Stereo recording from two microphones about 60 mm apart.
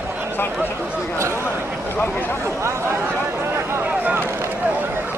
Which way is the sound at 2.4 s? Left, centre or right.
Right.